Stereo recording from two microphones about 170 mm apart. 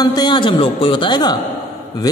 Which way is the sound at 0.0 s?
25° left (ahead or behind).